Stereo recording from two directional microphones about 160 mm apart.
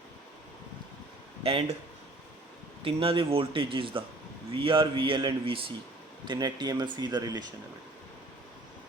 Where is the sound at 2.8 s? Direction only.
35° right (ahead or behind).